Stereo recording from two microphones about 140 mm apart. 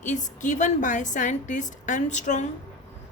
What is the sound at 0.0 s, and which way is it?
A woman's voice, 60° left (ahead or behind).